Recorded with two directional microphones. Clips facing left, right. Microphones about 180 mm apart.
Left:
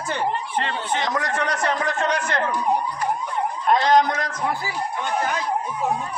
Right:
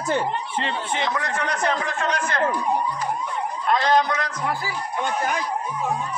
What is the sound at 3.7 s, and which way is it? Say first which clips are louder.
Speech: left 2 dB; 45° left (ahead or behind).